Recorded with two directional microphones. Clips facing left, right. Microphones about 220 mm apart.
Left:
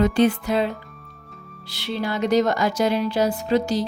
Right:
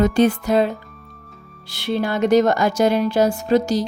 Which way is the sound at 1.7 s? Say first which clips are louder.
Right 5 dB; 50° right (ahead or behind).